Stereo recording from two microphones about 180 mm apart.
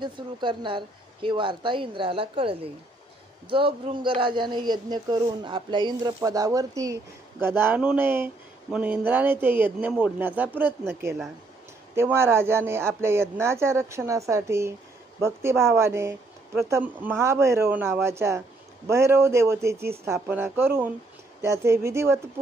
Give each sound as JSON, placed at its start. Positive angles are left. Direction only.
{"t": 0.0, "sound": "a woman's voice", "side_deg": -25}